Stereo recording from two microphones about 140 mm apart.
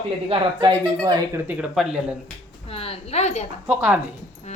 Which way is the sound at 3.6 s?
10° right (ahead or behind).